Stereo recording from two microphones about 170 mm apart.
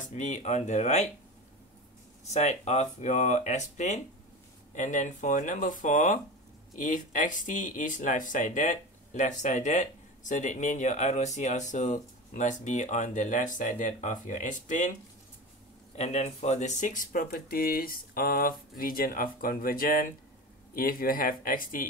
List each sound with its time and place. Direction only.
0.1 s speech: 45° left (ahead or behind)
2.3 s speech: 40° left (ahead or behind)
16.0 s speech: 40° left (ahead or behind)